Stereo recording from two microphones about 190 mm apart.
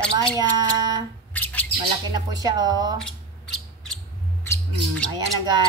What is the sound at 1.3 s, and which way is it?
Squawk, 10° left (ahead or behind).